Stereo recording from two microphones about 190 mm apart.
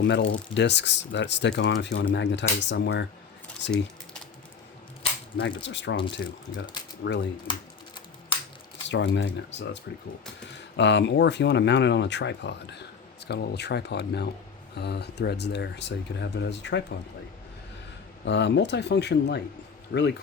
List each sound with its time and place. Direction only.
0.0 s speech: 70° left (ahead or behind)
5.4 s speech: 70° left (ahead or behind)
7.5 s speech: 25° left (ahead or behind)
8.9 s speech: 70° left (ahead or behind)
18.3 s speech: 65° left (ahead or behind)